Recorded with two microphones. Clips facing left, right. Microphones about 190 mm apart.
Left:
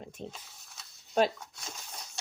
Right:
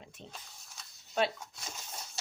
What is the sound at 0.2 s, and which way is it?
Speech, 45° left (ahead or behind).